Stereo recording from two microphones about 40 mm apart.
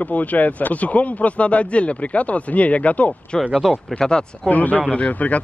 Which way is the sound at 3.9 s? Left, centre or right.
Left.